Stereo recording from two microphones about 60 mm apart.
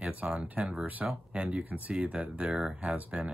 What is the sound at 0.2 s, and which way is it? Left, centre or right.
Speech, right.